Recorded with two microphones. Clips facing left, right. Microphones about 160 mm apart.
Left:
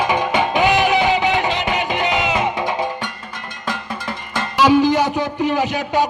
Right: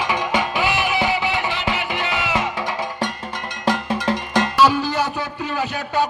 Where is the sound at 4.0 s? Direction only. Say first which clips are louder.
Right 7 dB; 80° right.